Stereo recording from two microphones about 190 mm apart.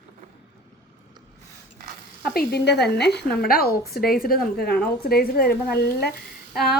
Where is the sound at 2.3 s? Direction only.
60° left (ahead or behind).